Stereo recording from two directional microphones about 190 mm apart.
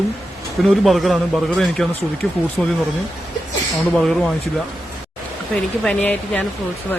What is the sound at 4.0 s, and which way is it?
Speech, centre (ahead or behind).